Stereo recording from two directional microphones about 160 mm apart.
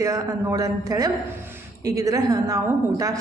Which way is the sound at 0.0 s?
20° right (ahead or behind).